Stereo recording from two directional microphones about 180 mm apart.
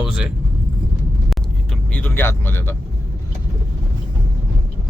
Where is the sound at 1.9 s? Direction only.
10° left (ahead or behind).